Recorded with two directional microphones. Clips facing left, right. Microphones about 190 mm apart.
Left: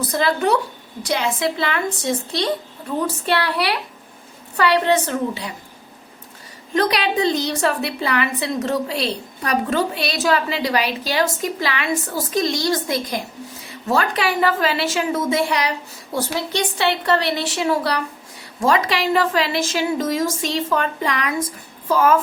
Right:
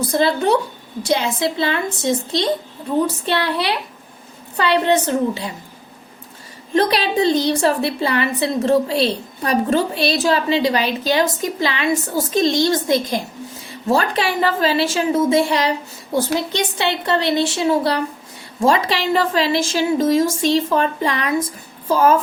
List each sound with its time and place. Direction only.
0.1 s a woman's voice: 30° right (ahead or behind)
6.7 s a woman's voice: 30° right (ahead or behind)